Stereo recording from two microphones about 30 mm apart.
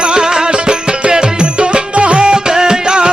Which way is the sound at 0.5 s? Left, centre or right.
Right.